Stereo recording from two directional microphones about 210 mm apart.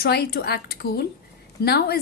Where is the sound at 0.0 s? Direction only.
50° left (ahead or behind).